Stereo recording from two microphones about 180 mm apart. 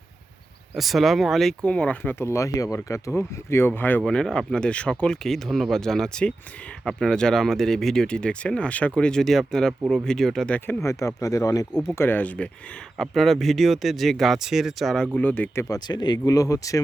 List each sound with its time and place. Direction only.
0.8 s speech: centre (ahead or behind)
15.7 s speech: 25° left (ahead or behind)